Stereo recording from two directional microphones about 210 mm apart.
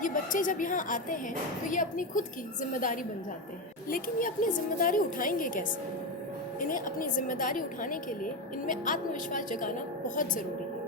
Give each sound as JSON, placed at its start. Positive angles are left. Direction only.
{"t": 0.0, "sound": "a woman's voice", "side_deg": 40}